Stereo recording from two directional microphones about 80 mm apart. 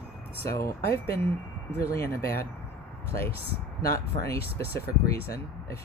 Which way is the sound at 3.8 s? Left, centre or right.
Left.